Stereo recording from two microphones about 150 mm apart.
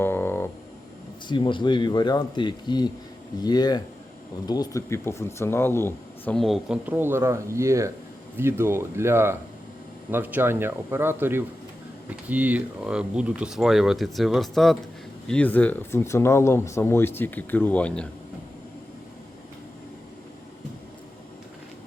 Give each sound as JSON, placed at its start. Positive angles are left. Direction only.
{"t": 0.0, "sound": "music", "side_deg": 15}
{"t": 1.3, "sound": "speech", "side_deg": 35}
{"t": 6.3, "sound": "speech", "side_deg": 0}